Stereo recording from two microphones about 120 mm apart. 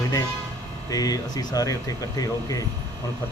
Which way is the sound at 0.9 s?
30° left (ahead or behind).